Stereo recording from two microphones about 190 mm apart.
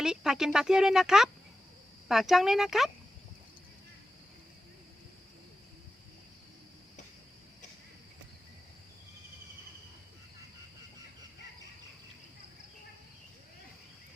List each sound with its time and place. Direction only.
0.0 s speech: 5° right (ahead or behind)